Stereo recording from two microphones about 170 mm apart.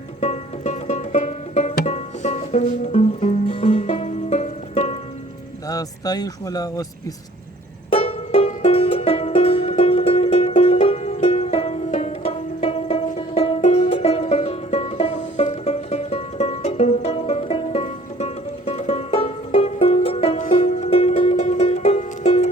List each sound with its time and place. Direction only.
0.2 s music: 40° left (ahead or behind)
5.6 s speech: 20° left (ahead or behind)
7.9 s music: 35° left (ahead or behind)